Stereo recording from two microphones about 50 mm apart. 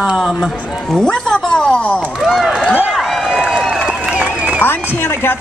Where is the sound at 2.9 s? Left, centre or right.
Centre.